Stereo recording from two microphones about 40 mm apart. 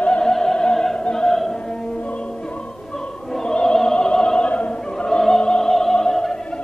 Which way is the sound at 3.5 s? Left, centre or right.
Centre.